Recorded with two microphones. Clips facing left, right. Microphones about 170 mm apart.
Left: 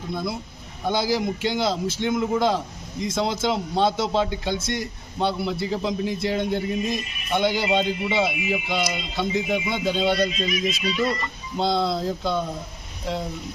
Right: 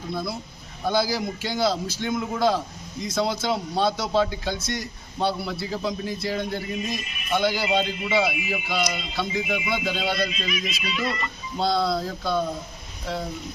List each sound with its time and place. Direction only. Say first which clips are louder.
0.9 s a man's voice: left 1 dB; 20° left (ahead or behind)
10.3 s speech: left 5 dB; 35° left (ahead or behind)
11.5 s a man's voice: left 1 dB; 20° left (ahead or behind)